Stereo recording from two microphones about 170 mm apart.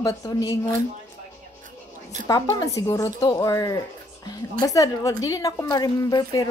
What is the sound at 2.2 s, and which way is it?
A woman's voice, 20° left (ahead or behind).